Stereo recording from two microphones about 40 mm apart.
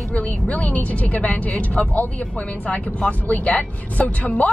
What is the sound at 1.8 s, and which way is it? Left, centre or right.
Speech, left.